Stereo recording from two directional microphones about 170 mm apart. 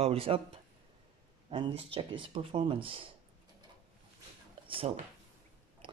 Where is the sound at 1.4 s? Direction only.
35° right (ahead or behind).